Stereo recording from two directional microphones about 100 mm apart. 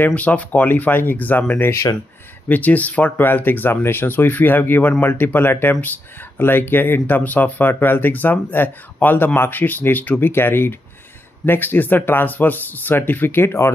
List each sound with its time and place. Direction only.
0.0 s speech: 15° left (ahead or behind)